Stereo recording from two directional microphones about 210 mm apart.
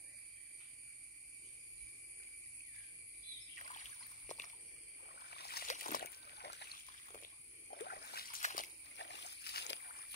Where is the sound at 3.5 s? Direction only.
35° left (ahead or behind).